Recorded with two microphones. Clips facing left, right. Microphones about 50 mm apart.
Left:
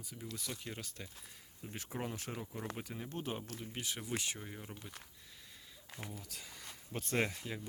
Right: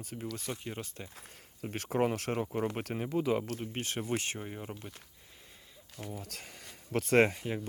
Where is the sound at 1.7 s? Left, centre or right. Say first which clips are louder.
Right 12 dB; right.